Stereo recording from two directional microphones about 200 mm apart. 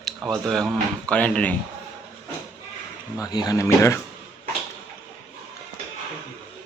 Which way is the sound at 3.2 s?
20° left (ahead or behind).